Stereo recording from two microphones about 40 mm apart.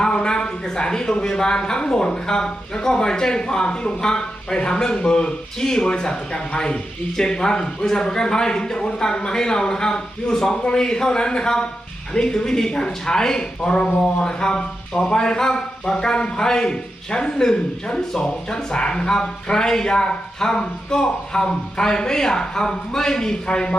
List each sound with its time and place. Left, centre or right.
0.0 s speech: centre